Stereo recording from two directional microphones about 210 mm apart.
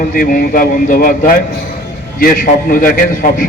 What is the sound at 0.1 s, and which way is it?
A man's voice, 40° left (ahead or behind).